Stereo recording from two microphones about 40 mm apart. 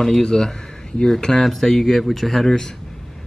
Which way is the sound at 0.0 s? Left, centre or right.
Centre.